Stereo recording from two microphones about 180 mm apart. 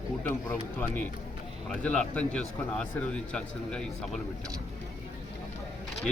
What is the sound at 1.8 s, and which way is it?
A man's voice, 5° left (ahead or behind).